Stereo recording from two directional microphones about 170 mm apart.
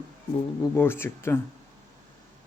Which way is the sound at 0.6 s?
15° left (ahead or behind).